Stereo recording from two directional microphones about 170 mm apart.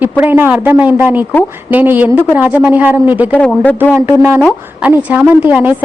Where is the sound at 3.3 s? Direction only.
10° left (ahead or behind).